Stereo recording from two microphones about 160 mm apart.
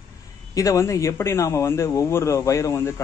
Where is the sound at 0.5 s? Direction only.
20° left (ahead or behind).